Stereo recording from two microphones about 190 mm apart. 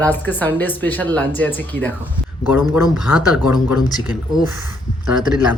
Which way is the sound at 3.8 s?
20° left (ahead or behind).